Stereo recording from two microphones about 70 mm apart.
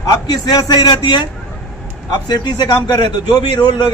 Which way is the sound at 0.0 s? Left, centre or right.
Left.